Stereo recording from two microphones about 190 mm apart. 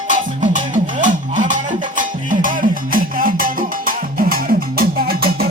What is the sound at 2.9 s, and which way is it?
Music, 50° right (ahead or behind).